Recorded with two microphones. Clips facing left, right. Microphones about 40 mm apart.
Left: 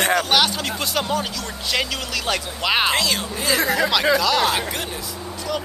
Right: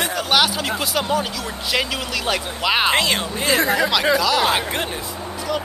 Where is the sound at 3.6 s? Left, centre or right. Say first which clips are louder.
Left 2 dB; centre.